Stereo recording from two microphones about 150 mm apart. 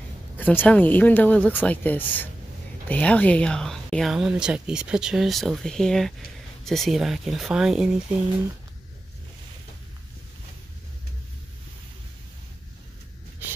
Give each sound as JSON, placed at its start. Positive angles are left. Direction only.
{"t": 0.4, "sound": "speech", "side_deg": 10}